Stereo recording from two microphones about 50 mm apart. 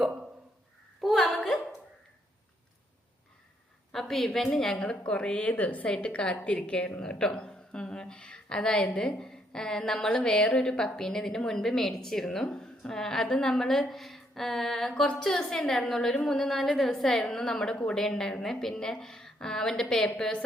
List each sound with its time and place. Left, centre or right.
1.0 s a sound: centre
3.9 s a woman's voice: centre
4.8 s a woman's voice: left